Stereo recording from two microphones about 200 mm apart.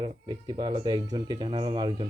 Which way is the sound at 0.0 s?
25° right (ahead or behind).